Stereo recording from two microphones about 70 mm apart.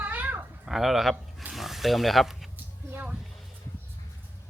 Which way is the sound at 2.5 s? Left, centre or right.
Right.